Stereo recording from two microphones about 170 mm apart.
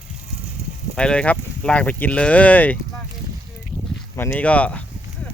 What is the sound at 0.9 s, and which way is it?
Speech, 5° left (ahead or behind).